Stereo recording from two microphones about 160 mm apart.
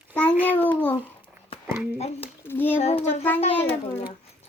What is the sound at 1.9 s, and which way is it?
Speech, 40° left (ahead or behind).